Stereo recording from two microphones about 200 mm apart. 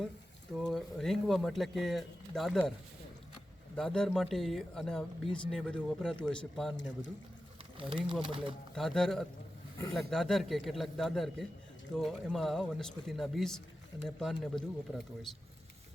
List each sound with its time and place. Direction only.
0.7 s speech: centre (ahead or behind)
3.8 s speech: 5° left (ahead or behind)
7.8 s speech: 25° right (ahead or behind)
8.7 s speech: 5° left (ahead or behind)